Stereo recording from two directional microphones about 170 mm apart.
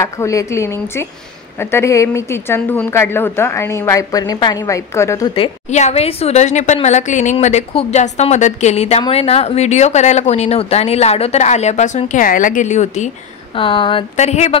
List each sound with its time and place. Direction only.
0.0 s a woman's voice: 20° left (ahead or behind)
5.3 s speech: 35° left (ahead or behind)
13.6 s speech: 30° left (ahead or behind)
14.1 s speech: 40° left (ahead or behind)